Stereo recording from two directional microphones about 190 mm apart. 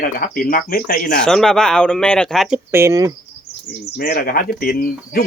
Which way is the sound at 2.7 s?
15° right (ahead or behind).